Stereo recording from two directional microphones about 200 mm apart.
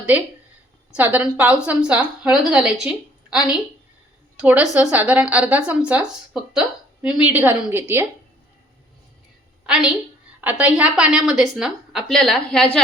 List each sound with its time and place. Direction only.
0.9 s a woman's voice: 5° right (ahead or behind)
3.3 s a woman's voice: 20° left (ahead or behind)
4.4 s a woman's voice: 5° right (ahead or behind)
9.6 s a woman's voice: 5° right (ahead or behind)